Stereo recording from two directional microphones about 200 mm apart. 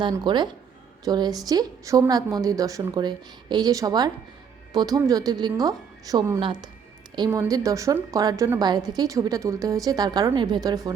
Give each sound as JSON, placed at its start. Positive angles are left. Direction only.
{"t": 0.0, "sound": "a woman's voice", "side_deg": -20}